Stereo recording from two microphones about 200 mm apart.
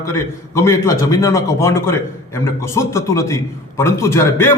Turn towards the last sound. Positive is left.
turn(degrees=10)  # may be behind; listen again after turning